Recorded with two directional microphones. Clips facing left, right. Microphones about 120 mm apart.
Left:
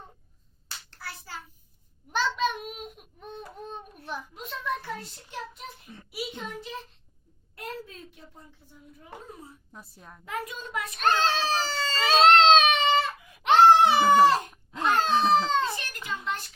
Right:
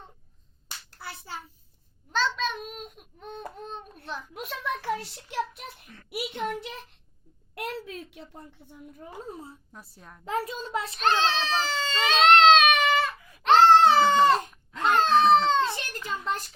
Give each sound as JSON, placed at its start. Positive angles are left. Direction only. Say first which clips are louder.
{"t": 0.9, "sound": "hands", "louder": "right 2 dB", "side_deg": -20}
{"t": 2.1, "sound": "a child's voice", "louder": "left 1 dB", "side_deg": 15}
{"t": 4.4, "sound": "a child's voice", "louder": "right 1 dB", "side_deg": -80}
{"t": 6.1, "sound": "a child's voice", "louder": "right 5 dB", "side_deg": -65}
{"t": 7.5, "sound": "a woman's voice", "louder": "right 4 dB", "side_deg": -80}
{"t": 9.3, "sound": "a child's voice", "louder": "right 4 dB", "side_deg": -30}
{"t": 9.7, "sound": "a child's voice", "louder": "even", "side_deg": 5}
{"t": 10.2, "sound": "a child's voice", "louder": "right 5 dB", "side_deg": -30}
{"t": 11.0, "sound": "speech", "louder": "left 1 dB", "side_deg": 45}
{"t": 13.4, "sound": "baby cry", "louder": "even", "side_deg": 15}
{"t": 14.9, "sound": "speech", "louder": "right 4 dB", "side_deg": 0}
{"t": 15.7, "sound": "a sound", "louder": "right 2 dB", "side_deg": -35}